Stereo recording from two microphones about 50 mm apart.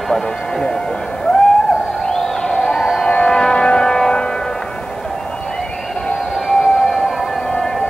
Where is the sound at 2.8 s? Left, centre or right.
Centre.